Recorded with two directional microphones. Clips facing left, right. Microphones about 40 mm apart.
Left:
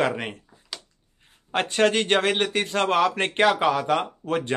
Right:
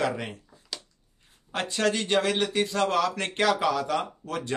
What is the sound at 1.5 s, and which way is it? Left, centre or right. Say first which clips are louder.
Speech: left 5 dB; left.